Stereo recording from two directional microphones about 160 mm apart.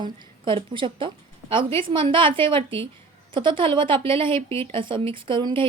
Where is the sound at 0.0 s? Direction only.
30° right (ahead or behind).